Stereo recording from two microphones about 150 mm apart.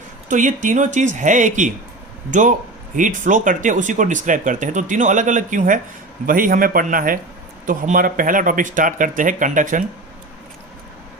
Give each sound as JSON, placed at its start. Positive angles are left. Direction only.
{"t": 0.3, "sound": "a man's voice", "side_deg": -60}